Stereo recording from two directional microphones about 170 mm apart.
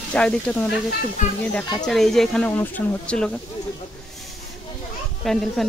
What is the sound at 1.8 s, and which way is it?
Speech, centre (ahead or behind).